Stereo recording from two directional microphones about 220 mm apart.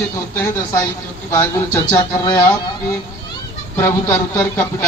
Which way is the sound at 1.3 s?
10° left (ahead or behind).